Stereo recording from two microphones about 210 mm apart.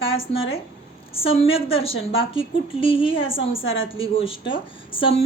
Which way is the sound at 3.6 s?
65° left (ahead or behind).